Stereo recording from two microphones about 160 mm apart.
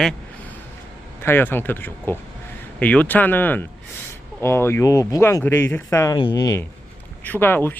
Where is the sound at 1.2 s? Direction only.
15° left (ahead or behind).